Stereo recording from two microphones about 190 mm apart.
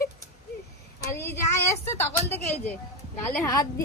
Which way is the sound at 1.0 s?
15° left (ahead or behind).